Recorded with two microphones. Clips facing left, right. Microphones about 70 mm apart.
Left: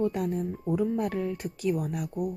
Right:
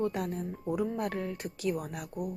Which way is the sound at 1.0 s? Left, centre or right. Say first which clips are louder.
Left 4 dB; right.